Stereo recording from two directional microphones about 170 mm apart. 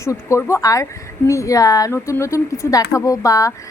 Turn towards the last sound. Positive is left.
turn(degrees=20)  # may be behind; listen again after turning